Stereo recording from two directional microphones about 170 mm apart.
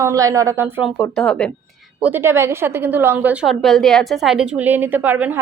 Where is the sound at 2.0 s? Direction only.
10° right (ahead or behind).